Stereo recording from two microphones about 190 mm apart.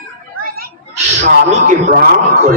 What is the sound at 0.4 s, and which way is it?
Children playing, 50° right (ahead or behind).